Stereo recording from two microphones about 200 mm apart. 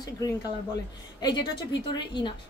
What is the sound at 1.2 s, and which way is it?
A woman's voice, 20° left (ahead or behind).